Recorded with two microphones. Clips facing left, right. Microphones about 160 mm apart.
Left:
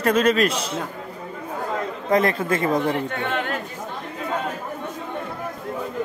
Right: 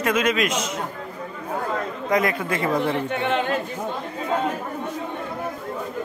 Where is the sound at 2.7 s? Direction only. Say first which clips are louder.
Left 1 dB; 20° left (ahead or behind).